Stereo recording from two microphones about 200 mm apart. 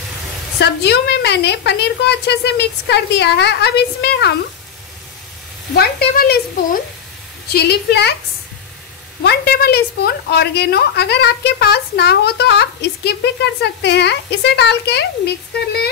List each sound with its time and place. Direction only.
0.6 s a woman's voice: 55° left (ahead or behind)
5.8 s a woman's voice: 50° left (ahead or behind)
9.2 s a woman's voice: 55° left (ahead or behind)